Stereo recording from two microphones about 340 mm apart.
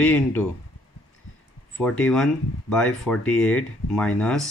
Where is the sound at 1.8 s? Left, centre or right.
Centre.